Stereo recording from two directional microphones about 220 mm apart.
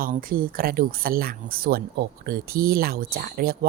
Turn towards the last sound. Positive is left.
turn(degrees=-45)  # may be behind; listen again after turning